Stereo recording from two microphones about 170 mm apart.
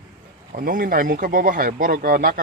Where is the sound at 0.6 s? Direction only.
55° right (ahead or behind).